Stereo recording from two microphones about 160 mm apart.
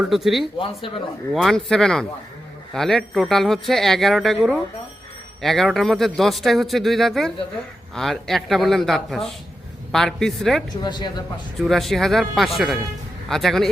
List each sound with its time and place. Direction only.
0.0 s speech: centre (ahead or behind)
10.8 s a man's voice: 25° left (ahead or behind)
11.6 s speech: centre (ahead or behind)